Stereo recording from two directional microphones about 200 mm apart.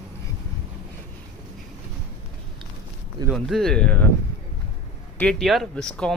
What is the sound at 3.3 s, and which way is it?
Speech, centre (ahead or behind).